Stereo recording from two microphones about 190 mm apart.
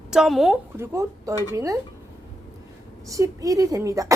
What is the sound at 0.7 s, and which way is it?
Speech, 15° right (ahead or behind).